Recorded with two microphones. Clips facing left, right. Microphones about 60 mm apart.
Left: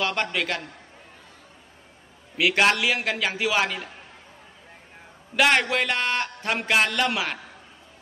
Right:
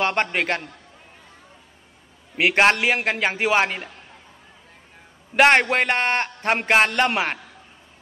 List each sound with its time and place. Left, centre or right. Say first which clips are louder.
0.0 s a man's voice: right 4 dB; right
2.3 s a man's voice: right 3 dB; right
5.3 s a man's voice: right 5 dB; right